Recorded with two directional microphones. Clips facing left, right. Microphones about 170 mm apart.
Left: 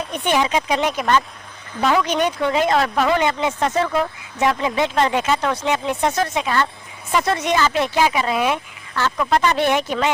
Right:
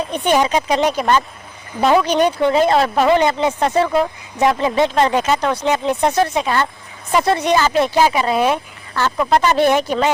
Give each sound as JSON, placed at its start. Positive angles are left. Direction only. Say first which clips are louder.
{"t": 0.1, "sound": "speech", "louder": "right 3 dB", "side_deg": -40}